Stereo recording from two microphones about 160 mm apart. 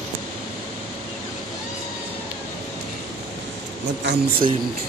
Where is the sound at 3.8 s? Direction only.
90° right.